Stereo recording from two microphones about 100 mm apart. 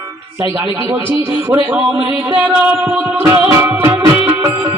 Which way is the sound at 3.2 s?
25° right (ahead or behind).